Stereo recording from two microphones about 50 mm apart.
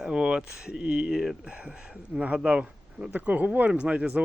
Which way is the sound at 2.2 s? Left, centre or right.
Right.